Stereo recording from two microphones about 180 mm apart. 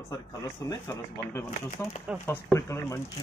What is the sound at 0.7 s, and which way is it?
Speech, 15° left (ahead or behind).